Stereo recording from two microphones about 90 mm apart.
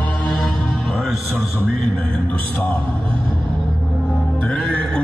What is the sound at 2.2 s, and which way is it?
Speech, 20° left (ahead or behind).